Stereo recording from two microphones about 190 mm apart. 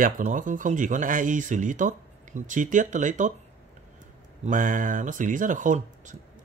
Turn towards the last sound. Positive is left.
turn(degrees=-40)  # may be behind; listen again after turning